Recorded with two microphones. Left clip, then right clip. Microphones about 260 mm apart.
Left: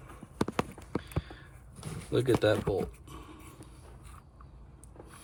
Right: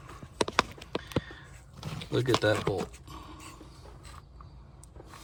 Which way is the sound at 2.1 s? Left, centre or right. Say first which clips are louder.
Even; centre.